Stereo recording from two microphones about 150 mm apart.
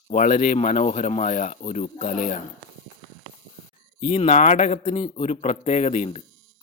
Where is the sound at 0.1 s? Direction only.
60° left (ahead or behind).